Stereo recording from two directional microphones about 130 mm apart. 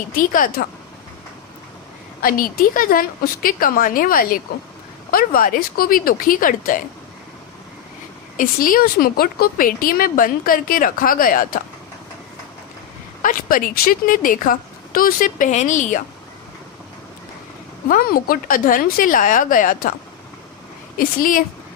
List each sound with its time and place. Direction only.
0.2 s a woman's voice: 90° left
2.2 s a woman's voice: 90° left
8.4 s a woman's voice: 90° left
13.2 s a woman's voice: 90° left; by 16.0 s 70° left (ahead or behind)
17.8 s a woman's voice: 90° left
21.2 s a woman's voice: 90° left